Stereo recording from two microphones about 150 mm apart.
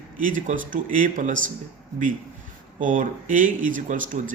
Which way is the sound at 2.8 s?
60° right (ahead or behind).